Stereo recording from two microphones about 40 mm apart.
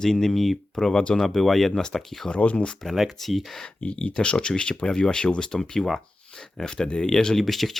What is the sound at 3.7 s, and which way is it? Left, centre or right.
Speech, left.